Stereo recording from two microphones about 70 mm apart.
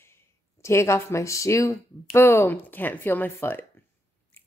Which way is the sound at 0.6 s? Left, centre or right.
Left.